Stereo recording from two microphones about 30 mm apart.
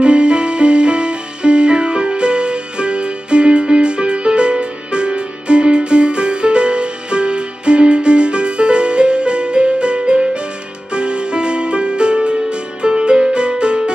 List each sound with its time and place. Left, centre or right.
0.0 s music: right